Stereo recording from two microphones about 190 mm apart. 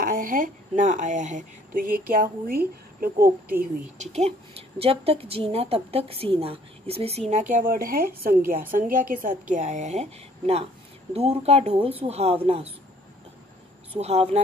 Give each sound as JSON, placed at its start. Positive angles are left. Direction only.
{"t": 0.2, "sound": "speech", "side_deg": -45}
{"t": 4.0, "sound": "a woman's voice", "side_deg": -35}
{"t": 7.6, "sound": "a woman's voice", "side_deg": -50}
{"t": 13.9, "sound": "a woman's voice", "side_deg": -35}